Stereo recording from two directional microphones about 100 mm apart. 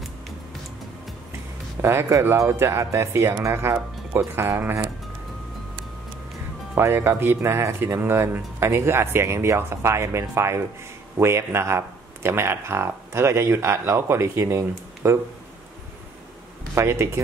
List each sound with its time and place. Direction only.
1.8 s speech: 25° right (ahead or behind)
6.7 s speech: 25° right (ahead or behind)
16.7 s speech: 25° right (ahead or behind)